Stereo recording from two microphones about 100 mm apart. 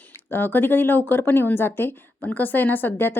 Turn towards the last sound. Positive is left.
turn(degrees=20)  # may be behind; listen again after turning